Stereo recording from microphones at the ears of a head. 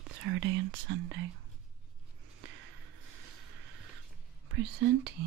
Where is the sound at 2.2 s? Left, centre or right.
Right.